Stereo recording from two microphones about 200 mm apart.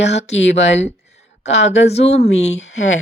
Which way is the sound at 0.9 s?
35° left (ahead or behind).